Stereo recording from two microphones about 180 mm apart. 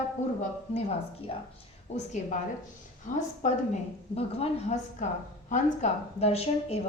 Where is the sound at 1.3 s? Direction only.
30° left (ahead or behind).